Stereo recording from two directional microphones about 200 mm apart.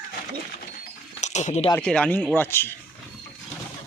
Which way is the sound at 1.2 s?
35° left (ahead or behind).